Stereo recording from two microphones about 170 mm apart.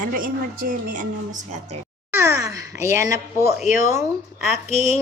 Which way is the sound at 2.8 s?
15° right (ahead or behind).